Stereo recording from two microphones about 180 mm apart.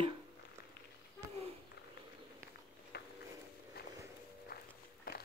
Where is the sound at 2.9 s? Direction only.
65° left (ahead or behind).